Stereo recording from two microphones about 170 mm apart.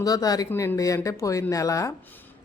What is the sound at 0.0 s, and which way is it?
Speech, 20° left (ahead or behind).